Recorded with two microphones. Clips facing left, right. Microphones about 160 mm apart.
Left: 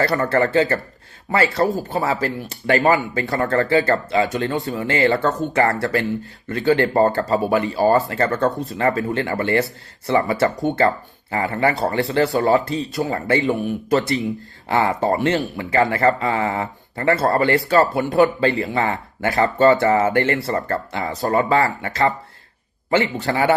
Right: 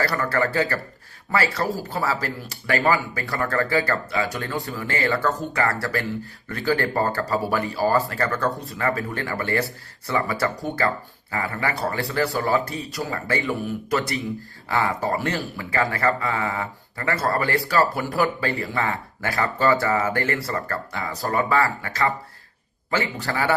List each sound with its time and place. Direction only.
0.2 s speech: 25° left (ahead or behind)
23.2 s speech: 20° left (ahead or behind)